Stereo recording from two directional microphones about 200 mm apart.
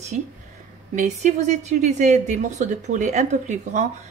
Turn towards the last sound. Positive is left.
turn(degrees=-35)  # may be behind; listen again after turning